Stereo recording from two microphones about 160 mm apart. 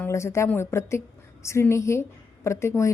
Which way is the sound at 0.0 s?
15° left (ahead or behind).